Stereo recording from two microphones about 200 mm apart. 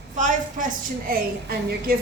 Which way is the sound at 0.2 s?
45° right (ahead or behind).